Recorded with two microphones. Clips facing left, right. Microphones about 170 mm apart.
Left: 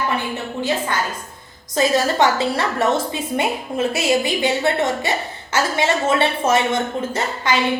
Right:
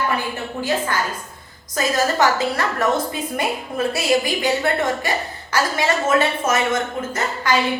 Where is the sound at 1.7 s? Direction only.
25° left (ahead or behind).